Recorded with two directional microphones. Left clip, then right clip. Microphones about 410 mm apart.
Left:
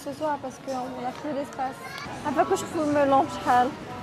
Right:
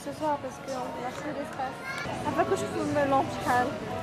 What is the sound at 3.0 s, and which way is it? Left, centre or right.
Speech, left.